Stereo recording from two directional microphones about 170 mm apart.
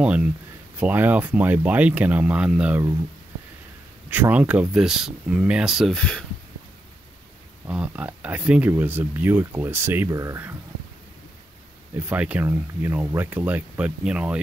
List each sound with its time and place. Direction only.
0.0 s speech: 5° right (ahead or behind)
4.1 s speech: 10° right (ahead or behind)
7.6 s speech: 5° right (ahead or behind)
12.1 s speech: 10° right (ahead or behind)